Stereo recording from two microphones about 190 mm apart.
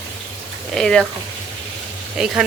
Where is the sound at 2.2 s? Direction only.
5° right (ahead or behind).